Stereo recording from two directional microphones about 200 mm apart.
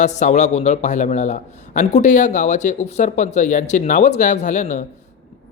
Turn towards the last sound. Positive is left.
turn(degrees=40)  # may be behind; listen again after turning